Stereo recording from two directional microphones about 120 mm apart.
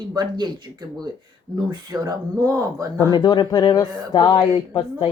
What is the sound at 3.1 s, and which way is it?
Speech, 35° left (ahead or behind).